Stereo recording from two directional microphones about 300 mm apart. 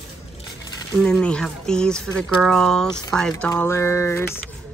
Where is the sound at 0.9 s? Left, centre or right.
Centre.